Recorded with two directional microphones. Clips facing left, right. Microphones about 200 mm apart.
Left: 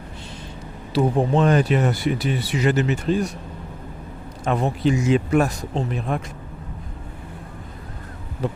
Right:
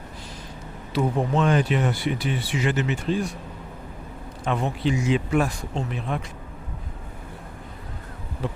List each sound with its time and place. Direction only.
0.9 s speech: 35° left (ahead or behind)
4.4 s speech: 40° left (ahead or behind)